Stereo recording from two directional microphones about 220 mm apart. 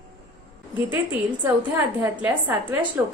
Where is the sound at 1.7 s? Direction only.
10° right (ahead or behind).